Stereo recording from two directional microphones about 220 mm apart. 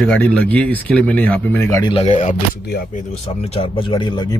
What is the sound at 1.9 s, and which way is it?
Speech, 25° left (ahead or behind).